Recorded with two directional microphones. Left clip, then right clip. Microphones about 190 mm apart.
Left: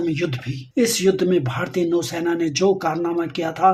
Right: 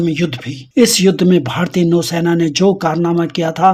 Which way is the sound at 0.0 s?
40° right (ahead or behind).